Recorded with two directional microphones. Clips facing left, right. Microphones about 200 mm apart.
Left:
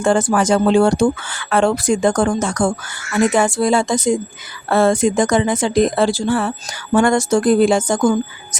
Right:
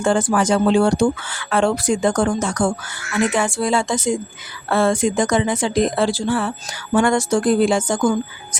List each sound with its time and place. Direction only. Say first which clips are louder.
0.0 s speech: left 2 dB; 45° left (ahead or behind)